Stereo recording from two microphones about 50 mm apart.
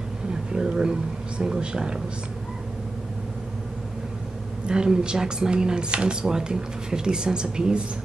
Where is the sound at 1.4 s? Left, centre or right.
Centre.